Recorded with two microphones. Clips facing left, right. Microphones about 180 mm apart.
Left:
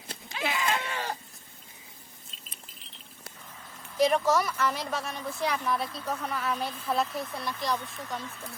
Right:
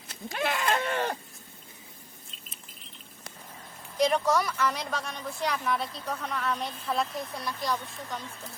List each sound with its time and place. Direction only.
0.3 s goat: 50° right (ahead or behind)
0.9 s sheep: 55° right (ahead or behind)
3.9 s speech: centre (ahead or behind)